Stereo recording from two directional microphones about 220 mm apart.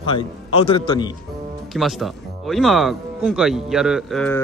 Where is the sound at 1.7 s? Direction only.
Centre (ahead or behind).